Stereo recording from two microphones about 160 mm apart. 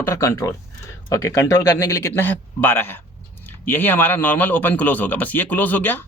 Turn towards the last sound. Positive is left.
turn(degrees=10)  # may be behind; listen again after turning